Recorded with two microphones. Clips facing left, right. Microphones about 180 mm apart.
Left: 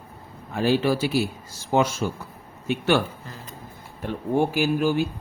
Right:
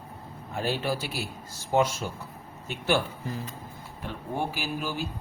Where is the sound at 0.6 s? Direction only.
90° left.